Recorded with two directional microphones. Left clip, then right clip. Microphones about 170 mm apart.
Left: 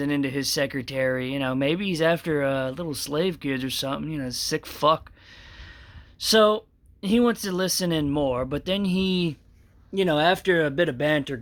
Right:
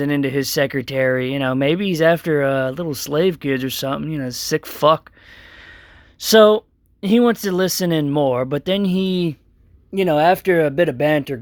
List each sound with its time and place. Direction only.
0.0 s speech: 40° right (ahead or behind)
6.1 s speech: 40° right (ahead or behind)